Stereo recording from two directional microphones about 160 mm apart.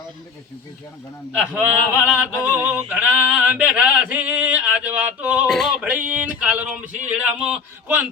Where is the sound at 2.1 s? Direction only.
10° right (ahead or behind).